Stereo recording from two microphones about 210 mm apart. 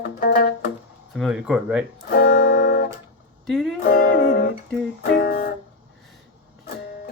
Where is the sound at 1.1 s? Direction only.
Centre (ahead or behind).